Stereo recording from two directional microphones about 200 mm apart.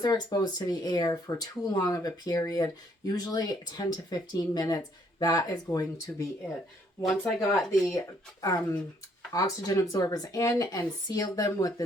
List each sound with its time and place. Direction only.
0.0 s speech: 20° left (ahead or behind)
7.0 s speech: 5° left (ahead or behind)
8.4 s speech: 15° left (ahead or behind)